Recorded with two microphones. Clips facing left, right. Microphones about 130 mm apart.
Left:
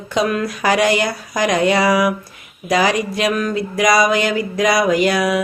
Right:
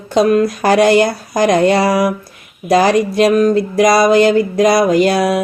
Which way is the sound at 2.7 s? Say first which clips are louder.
Right 5 dB; 45° right (ahead or behind).